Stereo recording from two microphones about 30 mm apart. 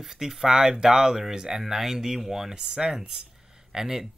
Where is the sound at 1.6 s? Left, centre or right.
Centre.